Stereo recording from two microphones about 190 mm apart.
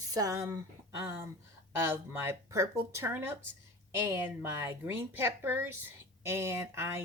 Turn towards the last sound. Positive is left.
turn(degrees=-15)  # may be behind; listen again after turning